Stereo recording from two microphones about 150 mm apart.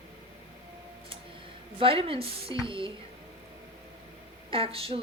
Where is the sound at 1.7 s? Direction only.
35° right (ahead or behind).